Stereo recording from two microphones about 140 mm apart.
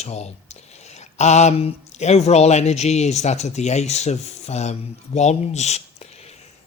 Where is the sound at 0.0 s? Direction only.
50° left (ahead or behind).